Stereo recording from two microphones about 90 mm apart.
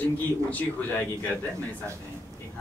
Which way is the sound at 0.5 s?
15° left (ahead or behind).